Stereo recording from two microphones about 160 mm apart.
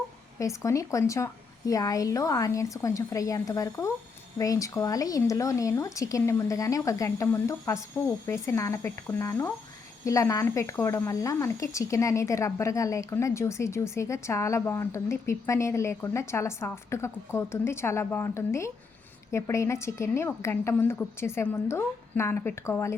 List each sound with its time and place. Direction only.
0.3 s a woman's voice: 20° left (ahead or behind)